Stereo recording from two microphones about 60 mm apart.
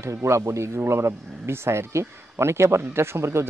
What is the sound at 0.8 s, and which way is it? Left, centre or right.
Speech, right.